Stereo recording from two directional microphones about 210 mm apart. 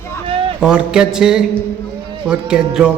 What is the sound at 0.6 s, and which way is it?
A man's voice, 5° right (ahead or behind).